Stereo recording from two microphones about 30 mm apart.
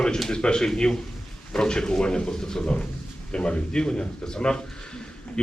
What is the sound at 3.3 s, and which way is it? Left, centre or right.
A man's voice, left.